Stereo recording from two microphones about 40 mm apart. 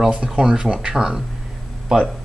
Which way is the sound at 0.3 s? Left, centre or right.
Centre.